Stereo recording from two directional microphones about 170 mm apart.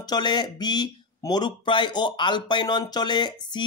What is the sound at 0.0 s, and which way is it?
Speech, 25° left (ahead or behind).